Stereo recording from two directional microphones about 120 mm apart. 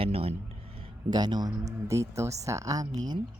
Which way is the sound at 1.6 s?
25° right (ahead or behind).